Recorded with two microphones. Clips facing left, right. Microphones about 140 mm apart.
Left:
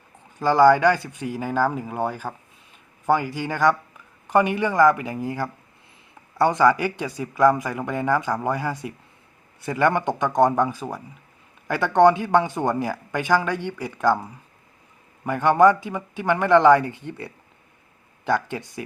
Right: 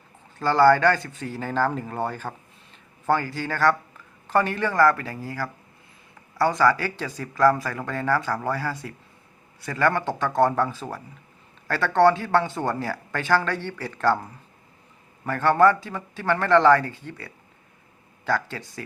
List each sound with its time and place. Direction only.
0.3 s speech: 15° left (ahead or behind)